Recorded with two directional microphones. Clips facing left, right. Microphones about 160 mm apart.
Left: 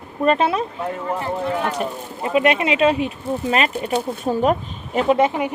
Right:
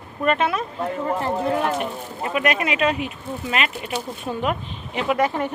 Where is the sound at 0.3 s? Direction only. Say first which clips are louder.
Left 3 dB; 30° left (ahead or behind).